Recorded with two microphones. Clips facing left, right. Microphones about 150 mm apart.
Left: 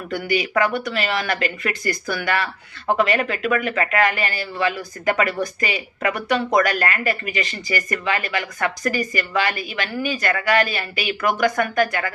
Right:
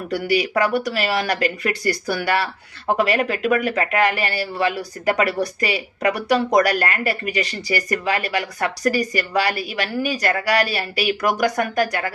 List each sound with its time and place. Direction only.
0.1 s speech: 35° right (ahead or behind)